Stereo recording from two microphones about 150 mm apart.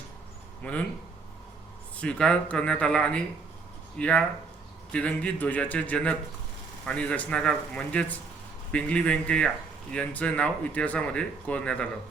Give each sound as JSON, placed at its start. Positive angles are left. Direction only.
{"t": 0.6, "sound": "speech", "side_deg": 10}
{"t": 2.0, "sound": "speech", "side_deg": 5}